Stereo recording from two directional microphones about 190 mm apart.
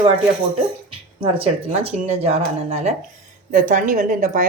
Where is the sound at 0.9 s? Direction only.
30° right (ahead or behind).